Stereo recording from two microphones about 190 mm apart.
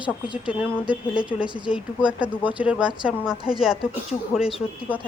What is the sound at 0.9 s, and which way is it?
Speech, 25° left (ahead or behind).